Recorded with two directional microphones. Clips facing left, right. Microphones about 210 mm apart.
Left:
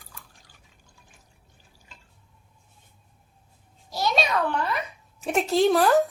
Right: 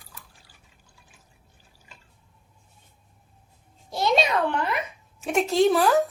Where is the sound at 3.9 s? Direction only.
25° right (ahead or behind).